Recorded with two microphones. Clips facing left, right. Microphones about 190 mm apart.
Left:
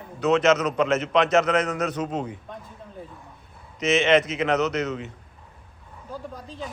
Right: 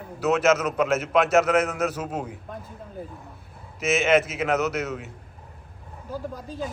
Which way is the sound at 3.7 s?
5° right (ahead or behind).